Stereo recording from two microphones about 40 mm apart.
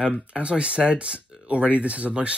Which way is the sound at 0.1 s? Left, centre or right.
Right.